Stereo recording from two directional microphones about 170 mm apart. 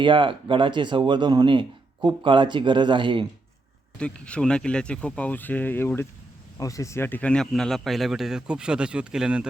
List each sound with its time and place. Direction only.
0.0 s speech: 30° right (ahead or behind)
3.9 s speech: 5° left (ahead or behind)